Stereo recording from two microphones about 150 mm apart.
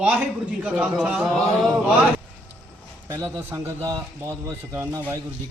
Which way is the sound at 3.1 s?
15° right (ahead or behind).